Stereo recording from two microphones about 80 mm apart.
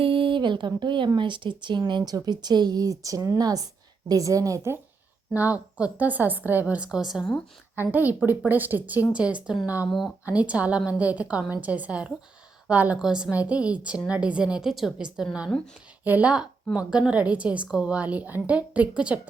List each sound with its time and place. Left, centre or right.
0.1 s speech: right
1.9 s a woman's voice: right
5.3 s a woman's voice: centre
7.8 s a woman's voice: right
15.4 s speech: centre
16.0 s a woman's voice: centre